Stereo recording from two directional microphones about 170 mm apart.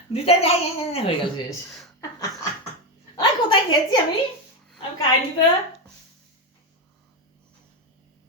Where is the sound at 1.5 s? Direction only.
Centre (ahead or behind).